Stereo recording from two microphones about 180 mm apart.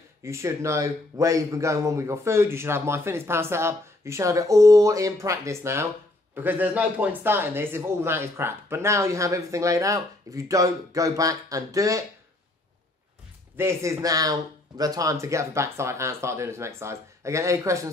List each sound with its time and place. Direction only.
0.2 s speech: 15° right (ahead or behind)
13.6 s speech: 15° right (ahead or behind)